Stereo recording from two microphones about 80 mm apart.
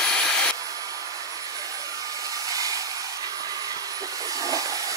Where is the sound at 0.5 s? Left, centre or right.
Right.